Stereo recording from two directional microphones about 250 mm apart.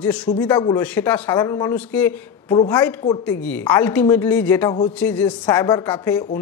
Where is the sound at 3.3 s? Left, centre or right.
Centre.